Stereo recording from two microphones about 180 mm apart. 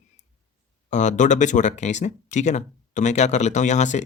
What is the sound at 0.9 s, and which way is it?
Speech, 40° left (ahead or behind).